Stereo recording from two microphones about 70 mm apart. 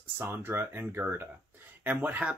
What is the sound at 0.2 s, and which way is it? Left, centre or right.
Speech, right.